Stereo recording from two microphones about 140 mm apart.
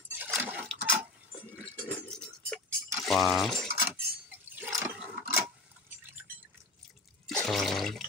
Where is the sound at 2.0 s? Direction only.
5° left (ahead or behind).